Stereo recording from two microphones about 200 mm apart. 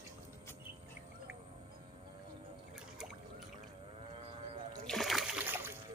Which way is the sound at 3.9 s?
30° right (ahead or behind).